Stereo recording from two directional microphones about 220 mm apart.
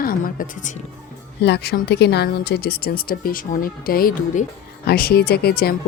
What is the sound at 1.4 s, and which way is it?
A woman's voice, 50° left (ahead or behind).